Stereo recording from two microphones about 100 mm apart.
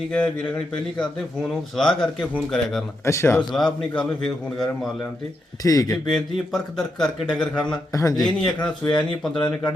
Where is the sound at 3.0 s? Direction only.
30° left (ahead or behind).